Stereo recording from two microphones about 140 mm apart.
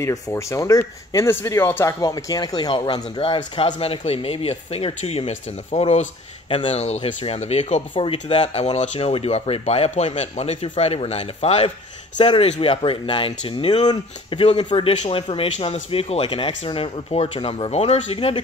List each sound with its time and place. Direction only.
0.0 s speech: 20° left (ahead or behind); by 6.0 s 55° left (ahead or behind)
6.5 s speech: 45° left (ahead or behind)
7.9 s speech: 40° left (ahead or behind)
12.2 s speech: 35° left (ahead or behind)